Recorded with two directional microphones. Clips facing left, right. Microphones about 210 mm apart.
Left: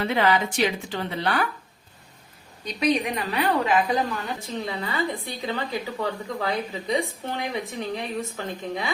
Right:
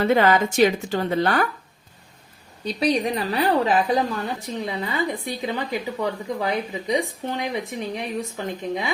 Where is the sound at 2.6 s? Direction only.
35° right (ahead or behind).